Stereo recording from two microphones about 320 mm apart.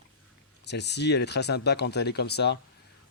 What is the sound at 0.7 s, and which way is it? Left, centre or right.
Speech, left.